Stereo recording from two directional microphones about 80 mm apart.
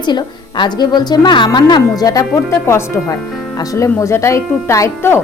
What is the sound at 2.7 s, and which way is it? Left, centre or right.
A woman's voice, left.